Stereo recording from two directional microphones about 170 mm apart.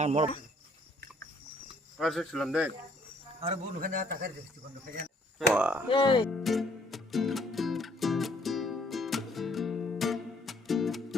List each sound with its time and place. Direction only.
0.0 s speech: 40° right (ahead or behind)
2.0 s speech: centre (ahead or behind)
3.8 s a man's voice: 55° right (ahead or behind)
5.5 s speech: 10° right (ahead or behind)
5.9 s speech: 30° left (ahead or behind)
6.3 s music: centre (ahead or behind)